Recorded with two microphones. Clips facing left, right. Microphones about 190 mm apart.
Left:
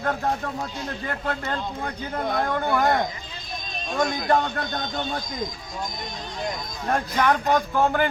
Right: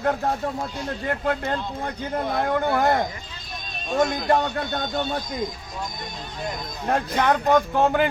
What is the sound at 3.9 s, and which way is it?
Speech, 5° right (ahead or behind).